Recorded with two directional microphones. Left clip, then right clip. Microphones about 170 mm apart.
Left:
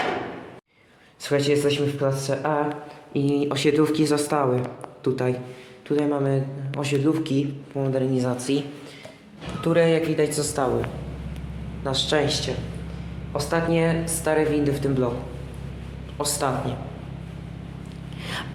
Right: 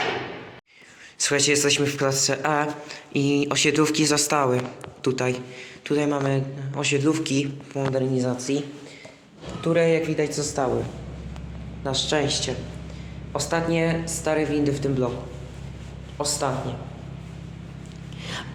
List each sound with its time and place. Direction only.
1.2 s a man's voice: 10° right (ahead or behind)
9.6 s a man's voice: centre (ahead or behind)
11.8 s speech: 5° right (ahead or behind)
13.3 s speech: 20° right (ahead or behind)
13.7 s a man's voice: 10° right (ahead or behind)
16.1 s a man's voice: centre (ahead or behind)
18.2 s a sound: centre (ahead or behind)